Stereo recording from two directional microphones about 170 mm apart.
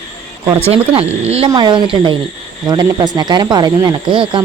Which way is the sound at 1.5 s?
25° right (ahead or behind).